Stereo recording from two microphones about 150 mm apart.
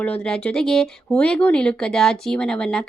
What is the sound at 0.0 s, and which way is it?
A woman's voice, 10° left (ahead or behind).